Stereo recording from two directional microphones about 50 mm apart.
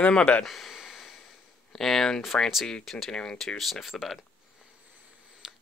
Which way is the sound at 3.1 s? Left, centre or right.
Centre.